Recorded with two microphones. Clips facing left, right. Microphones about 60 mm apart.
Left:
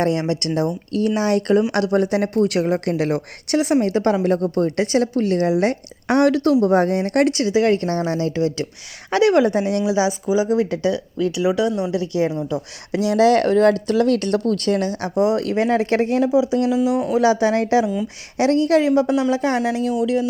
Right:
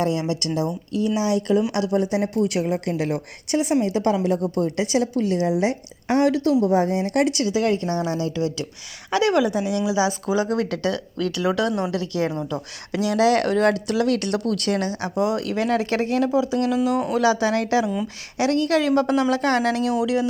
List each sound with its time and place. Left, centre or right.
0.0 s a woman's voice: left
2.4 s a woman's voice: left
3.9 s a woman's voice: left
7.8 s a woman's voice: left
10.3 s speech: centre
13.1 s a woman's voice: left
16.6 s speech: centre
17.2 s a woman's voice: left
18.9 s speech: centre
20.0 s speech: centre